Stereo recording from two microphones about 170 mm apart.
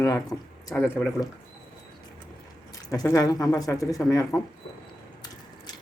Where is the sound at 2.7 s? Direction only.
20° left (ahead or behind).